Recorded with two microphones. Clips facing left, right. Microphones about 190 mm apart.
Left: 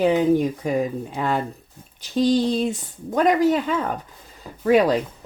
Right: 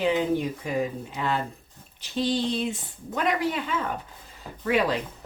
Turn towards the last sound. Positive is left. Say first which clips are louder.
# left 7 dB
turn(degrees=40)  # may be behind; listen again after turning